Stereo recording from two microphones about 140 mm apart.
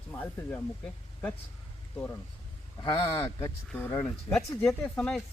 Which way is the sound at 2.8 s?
40° left (ahead or behind).